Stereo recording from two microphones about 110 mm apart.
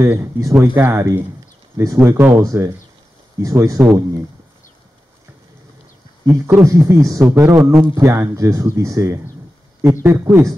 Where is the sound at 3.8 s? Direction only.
5° right (ahead or behind).